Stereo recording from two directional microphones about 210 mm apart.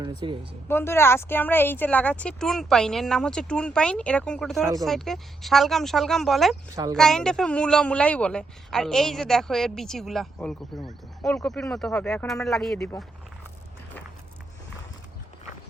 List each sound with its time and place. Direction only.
0.2 s speech: 25° right (ahead or behind)
0.7 s speech: 10° left (ahead or behind)